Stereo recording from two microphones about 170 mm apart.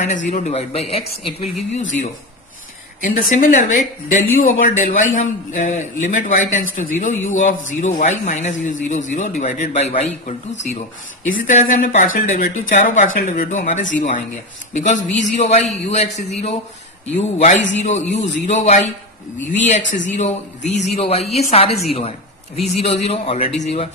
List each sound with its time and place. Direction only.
0.0 s a woman's voice: 45° left (ahead or behind)
3.0 s a woman's voice: 55° left (ahead or behind); by 23.9 s 40° left (ahead or behind)